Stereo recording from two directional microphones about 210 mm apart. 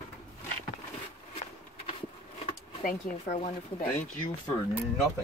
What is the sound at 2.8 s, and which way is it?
Speech, 40° left (ahead or behind).